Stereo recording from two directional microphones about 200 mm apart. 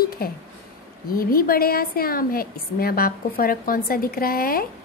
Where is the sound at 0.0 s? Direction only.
50° left (ahead or behind).